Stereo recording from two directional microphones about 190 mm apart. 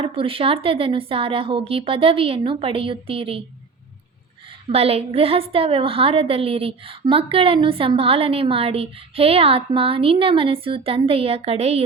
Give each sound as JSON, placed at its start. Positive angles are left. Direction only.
{"t": 0.0, "sound": "a woman's voice", "side_deg": -30}
{"t": 4.7, "sound": "a woman's voice", "side_deg": -30}